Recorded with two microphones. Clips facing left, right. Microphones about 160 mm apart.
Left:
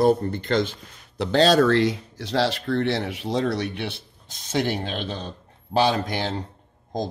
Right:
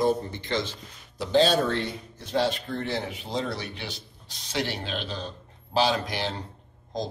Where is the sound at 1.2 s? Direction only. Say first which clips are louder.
Left 4 dB; 90° left; by 6.2 s 55° left (ahead or behind).